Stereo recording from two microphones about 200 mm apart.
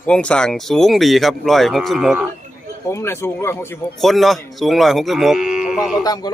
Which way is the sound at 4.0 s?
Centre (ahead or behind).